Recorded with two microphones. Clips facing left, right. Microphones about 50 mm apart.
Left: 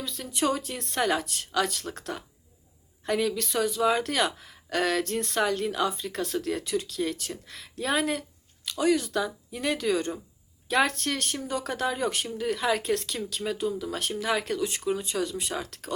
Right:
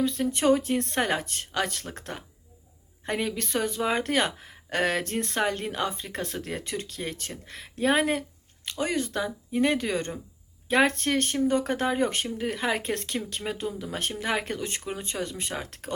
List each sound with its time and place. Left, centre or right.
0.0 s speech: right